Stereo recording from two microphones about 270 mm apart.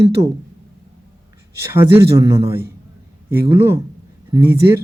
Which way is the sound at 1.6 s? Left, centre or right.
Centre.